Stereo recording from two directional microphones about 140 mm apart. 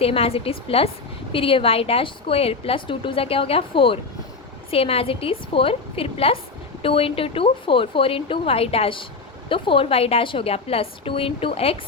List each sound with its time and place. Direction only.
0.0 s a woman's voice: 45° left (ahead or behind)